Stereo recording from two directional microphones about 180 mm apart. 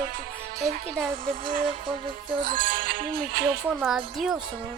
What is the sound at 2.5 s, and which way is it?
Music, 50° right (ahead or behind).